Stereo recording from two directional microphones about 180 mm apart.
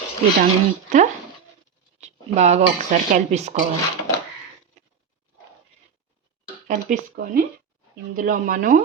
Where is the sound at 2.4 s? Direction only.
40° right (ahead or behind).